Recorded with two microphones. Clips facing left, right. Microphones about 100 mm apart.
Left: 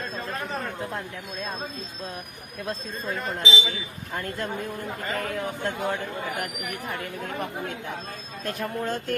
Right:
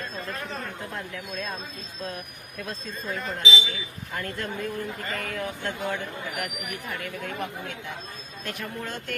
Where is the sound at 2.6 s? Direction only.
30° left (ahead or behind).